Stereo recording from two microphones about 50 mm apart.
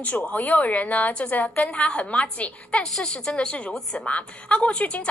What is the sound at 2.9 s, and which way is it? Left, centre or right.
A woman's voice, centre.